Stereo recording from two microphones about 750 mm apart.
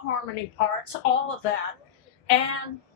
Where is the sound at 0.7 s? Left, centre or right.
Left.